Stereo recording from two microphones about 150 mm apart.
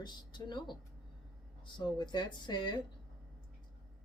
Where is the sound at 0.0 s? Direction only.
30° left (ahead or behind).